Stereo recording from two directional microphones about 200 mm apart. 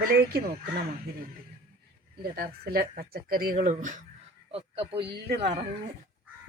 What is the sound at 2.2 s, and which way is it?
Speech, 50° right (ahead or behind).